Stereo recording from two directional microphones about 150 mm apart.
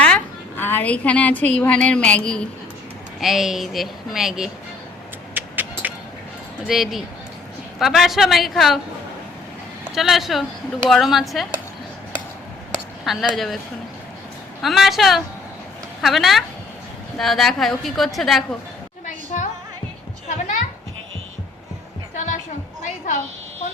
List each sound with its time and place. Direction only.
0.0 s a woman's voice: 10° left (ahead or behind)
5.3 s a sound: 10° right (ahead or behind)
6.6 s a woman's voice: centre (ahead or behind)
9.9 s a woman's voice: centre (ahead or behind)
13.1 s a woman's voice: centre (ahead or behind)
14.6 s a woman's voice: centre (ahead or behind)
19.0 s a sound: 55° left (ahead or behind)
20.2 s children playing: 55° left (ahead or behind)